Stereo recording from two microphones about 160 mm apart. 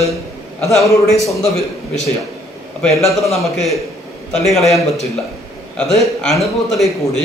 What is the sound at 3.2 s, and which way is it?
A man's voice, centre (ahead or behind).